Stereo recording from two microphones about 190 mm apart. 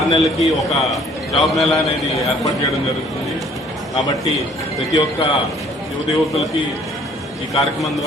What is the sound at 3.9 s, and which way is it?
Speech, 20° left (ahead or behind).